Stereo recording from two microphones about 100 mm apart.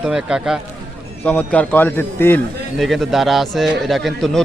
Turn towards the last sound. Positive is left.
turn(degrees=0)  # may be behind; listen again after turning